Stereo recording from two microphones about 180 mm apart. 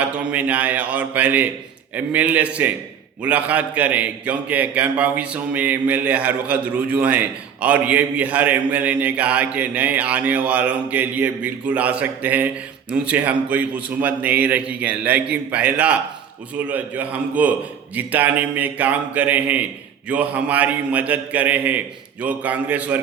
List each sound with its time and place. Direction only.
0.0 s a man's voice: 5° right (ahead or behind)